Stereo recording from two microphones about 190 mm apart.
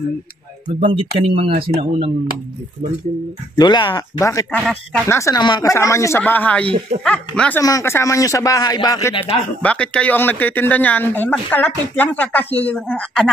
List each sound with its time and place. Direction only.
0.7 s speech: 30° right (ahead or behind)
3.5 s speech: 25° left (ahead or behind)
9.6 s speech: 5° left (ahead or behind)